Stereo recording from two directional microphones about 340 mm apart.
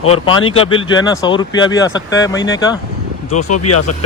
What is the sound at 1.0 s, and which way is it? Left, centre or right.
Speech, centre.